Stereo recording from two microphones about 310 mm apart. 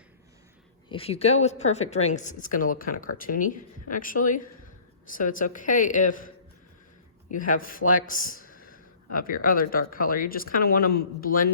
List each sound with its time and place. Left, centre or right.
0.9 s a man's voice: centre